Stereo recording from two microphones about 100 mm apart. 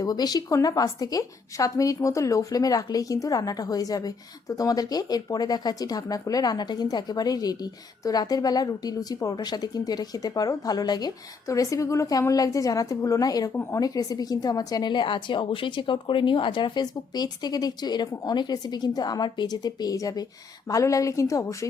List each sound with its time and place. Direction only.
0.0 s a woman's voice: 40° left (ahead or behind)
13.5 s speech: 20° left (ahead or behind)
13.7 s a woman's voice: 35° left (ahead or behind)